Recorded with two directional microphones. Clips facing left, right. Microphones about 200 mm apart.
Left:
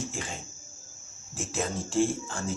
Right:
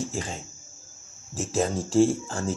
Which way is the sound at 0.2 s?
35° right (ahead or behind).